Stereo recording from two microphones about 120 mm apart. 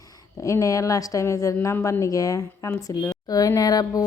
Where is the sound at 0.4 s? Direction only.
25° left (ahead or behind).